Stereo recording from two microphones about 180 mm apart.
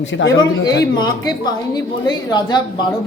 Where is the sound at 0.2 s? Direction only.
90° left.